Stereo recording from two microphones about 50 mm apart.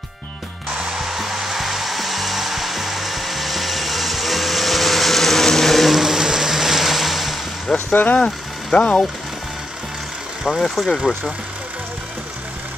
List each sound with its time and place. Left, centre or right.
0.9 s hair dryer: centre
7.7 s speech: left
8.7 s speech: left
10.5 s speech: centre